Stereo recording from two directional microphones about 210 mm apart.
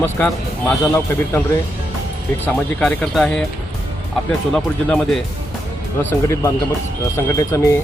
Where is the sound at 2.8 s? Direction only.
Centre (ahead or behind).